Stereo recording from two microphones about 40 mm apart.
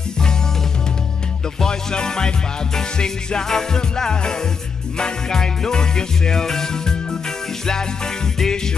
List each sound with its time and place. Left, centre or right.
1.6 s music: centre